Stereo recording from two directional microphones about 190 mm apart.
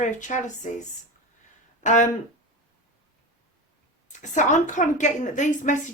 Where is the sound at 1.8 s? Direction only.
40° left (ahead or behind).